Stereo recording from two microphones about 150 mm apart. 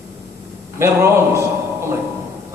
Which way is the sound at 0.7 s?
15° right (ahead or behind).